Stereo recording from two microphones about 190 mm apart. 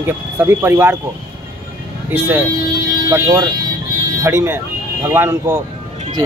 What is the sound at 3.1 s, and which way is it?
Speech, 20° right (ahead or behind).